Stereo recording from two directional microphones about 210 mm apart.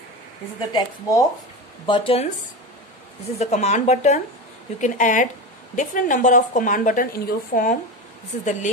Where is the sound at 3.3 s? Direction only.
35° left (ahead or behind).